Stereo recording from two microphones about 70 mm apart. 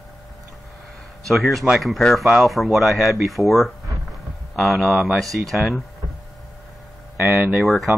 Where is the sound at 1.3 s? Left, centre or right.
Centre.